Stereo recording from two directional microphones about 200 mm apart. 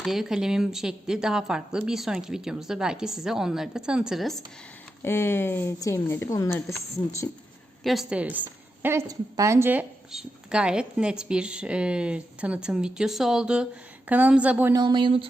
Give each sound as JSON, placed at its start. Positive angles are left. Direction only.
{"t": 0.0, "sound": "a woman's voice", "side_deg": 0}
{"t": 5.0, "sound": "speech", "side_deg": 10}
{"t": 7.9, "sound": "a woman's voice", "side_deg": -5}
{"t": 14.8, "sound": "speech", "side_deg": -20}